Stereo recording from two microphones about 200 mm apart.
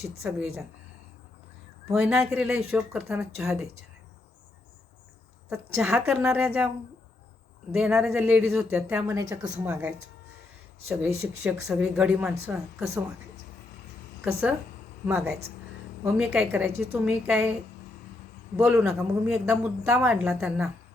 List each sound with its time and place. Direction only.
0.3 s a man's voice: centre (ahead or behind)
1.9 s a man's voice: centre (ahead or behind)
5.5 s speech: 10° right (ahead or behind)
5.9 s speech: centre (ahead or behind)
7.7 s a man's voice: centre (ahead or behind)
15.0 s a man's voice: 10° right (ahead or behind)
18.6 s a man's voice: centre (ahead or behind)